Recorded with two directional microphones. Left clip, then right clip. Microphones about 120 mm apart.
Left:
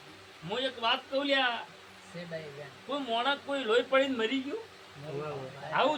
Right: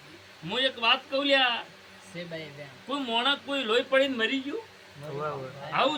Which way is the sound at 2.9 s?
Centre (ahead or behind).